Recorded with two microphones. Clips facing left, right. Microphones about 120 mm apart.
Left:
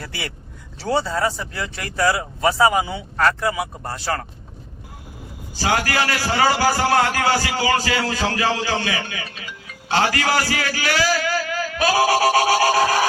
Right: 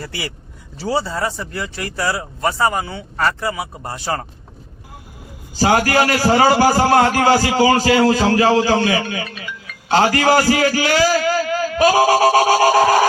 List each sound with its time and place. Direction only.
0.0 s speech: 5° right (ahead or behind)
3.6 s speech: 15° right (ahead or behind)
5.7 s a man's voice: 35° right (ahead or behind)
9.2 s speech: 30° left (ahead or behind)
9.9 s a man's voice: 40° right (ahead or behind)